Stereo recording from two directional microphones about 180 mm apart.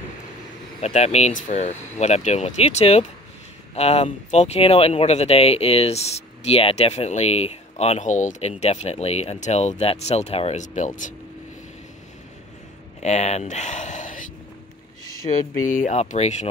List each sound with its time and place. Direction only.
0.7 s speech: 35° left (ahead or behind)
13.0 s speech: 40° left (ahead or behind)
15.3 s speech: 30° left (ahead or behind)
15.7 s speech: 45° left (ahead or behind)